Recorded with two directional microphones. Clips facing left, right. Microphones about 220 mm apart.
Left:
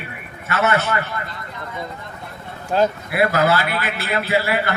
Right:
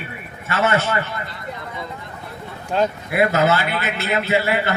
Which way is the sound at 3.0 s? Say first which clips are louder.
Even; 20° right (ahead or behind).